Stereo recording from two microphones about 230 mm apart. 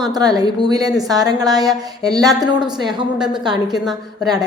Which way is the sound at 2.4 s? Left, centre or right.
Centre.